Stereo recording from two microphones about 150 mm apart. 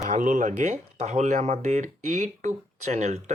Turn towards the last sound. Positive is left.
turn(degrees=-50)  # may be behind; listen again after turning